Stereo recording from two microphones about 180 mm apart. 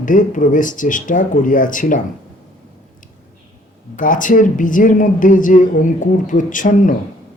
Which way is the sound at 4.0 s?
45° left (ahead or behind).